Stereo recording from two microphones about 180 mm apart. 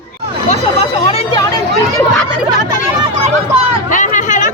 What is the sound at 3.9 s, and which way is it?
Hubbub, 45° left (ahead or behind).